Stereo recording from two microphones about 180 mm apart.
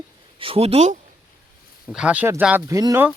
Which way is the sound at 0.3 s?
30° right (ahead or behind).